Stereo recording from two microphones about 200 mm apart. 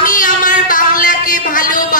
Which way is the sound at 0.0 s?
40° left (ahead or behind).